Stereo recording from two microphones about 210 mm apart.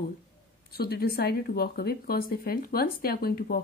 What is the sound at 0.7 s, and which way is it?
Speech, 45° left (ahead or behind).